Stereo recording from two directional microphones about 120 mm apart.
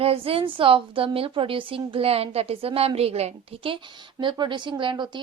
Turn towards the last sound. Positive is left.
turn(degrees=-40)  # may be behind; listen again after turning